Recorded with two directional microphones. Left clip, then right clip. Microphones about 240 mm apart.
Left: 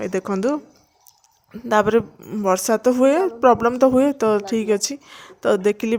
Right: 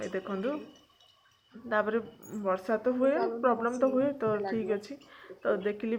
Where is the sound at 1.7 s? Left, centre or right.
Left.